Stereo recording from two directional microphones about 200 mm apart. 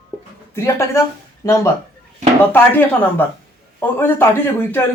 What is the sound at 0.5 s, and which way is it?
Speech, 15° left (ahead or behind).